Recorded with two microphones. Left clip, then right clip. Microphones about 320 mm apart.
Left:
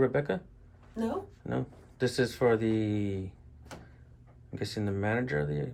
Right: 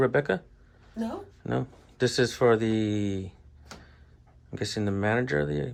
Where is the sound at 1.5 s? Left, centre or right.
Centre.